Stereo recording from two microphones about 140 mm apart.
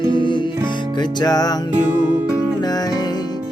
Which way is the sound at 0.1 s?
35° left (ahead or behind).